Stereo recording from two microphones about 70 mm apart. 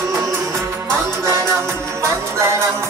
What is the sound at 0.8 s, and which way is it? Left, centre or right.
Music, right.